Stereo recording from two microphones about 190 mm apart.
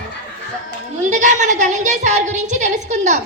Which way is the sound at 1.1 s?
40° right (ahead or behind).